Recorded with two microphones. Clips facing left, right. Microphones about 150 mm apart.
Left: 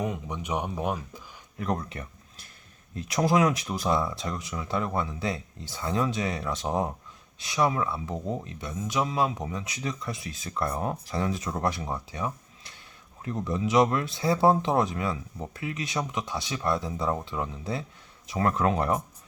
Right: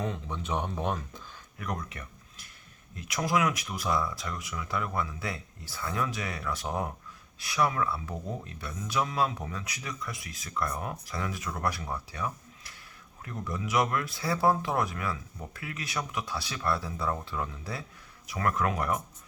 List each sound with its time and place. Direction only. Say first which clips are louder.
0.0 s speech: left 3 dB; 15° left (ahead or behind)
1.5 s a sound: left 6 dB; 30° left (ahead or behind)
2.9 s speech: left 5 dB; 30° left (ahead or behind)